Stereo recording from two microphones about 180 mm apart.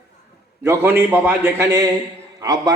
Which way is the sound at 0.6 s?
15° right (ahead or behind).